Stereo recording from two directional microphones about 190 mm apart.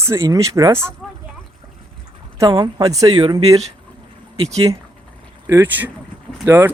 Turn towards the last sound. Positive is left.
turn(degrees=-10)  # may be behind; listen again after turning